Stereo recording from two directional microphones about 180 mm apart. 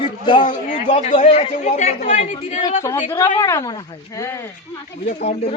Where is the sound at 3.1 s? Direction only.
20° left (ahead or behind).